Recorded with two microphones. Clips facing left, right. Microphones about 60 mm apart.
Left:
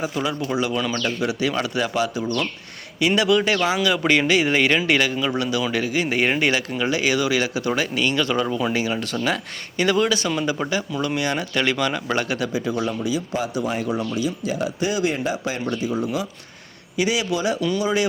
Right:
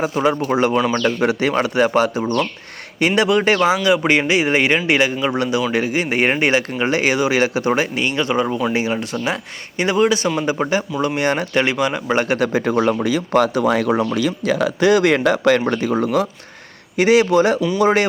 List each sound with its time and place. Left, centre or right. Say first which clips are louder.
0.0 s speech: right 7 dB; right
11.6 s speech: right 3 dB; right
12.1 s speech: right 6 dB; right
12.6 s speech: right 7 dB; right
15.6 s speech: right 5 dB; right
17.0 s speech: right 9 dB; right